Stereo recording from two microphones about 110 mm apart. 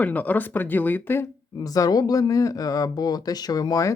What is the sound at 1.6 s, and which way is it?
Speech, 35° left (ahead or behind).